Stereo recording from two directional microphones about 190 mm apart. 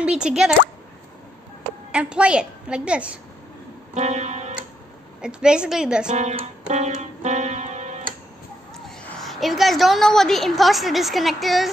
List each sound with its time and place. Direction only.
0.0 s speech: 5° right (ahead or behind)
1.9 s a woman's voice: 5° right (ahead or behind)
3.9 s music: 35° right (ahead or behind)
5.2 s a woman's voice: 5° right (ahead or behind)
6.0 s music: 35° right (ahead or behind)
8.7 s a woman's voice: centre (ahead or behind)